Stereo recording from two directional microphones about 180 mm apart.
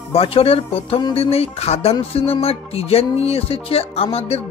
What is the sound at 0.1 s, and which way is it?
Speech, 30° left (ahead or behind).